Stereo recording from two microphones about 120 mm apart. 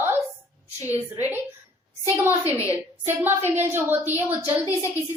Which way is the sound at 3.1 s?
20° right (ahead or behind).